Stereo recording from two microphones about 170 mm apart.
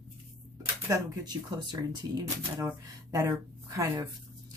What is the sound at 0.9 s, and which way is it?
Speech, 25° right (ahead or behind).